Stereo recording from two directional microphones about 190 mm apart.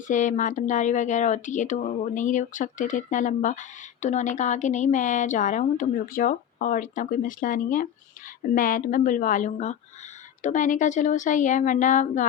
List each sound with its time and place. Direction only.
0.1 s a woman's voice: 40° left (ahead or behind)